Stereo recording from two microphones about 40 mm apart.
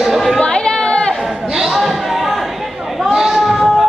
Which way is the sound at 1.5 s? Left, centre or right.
Centre.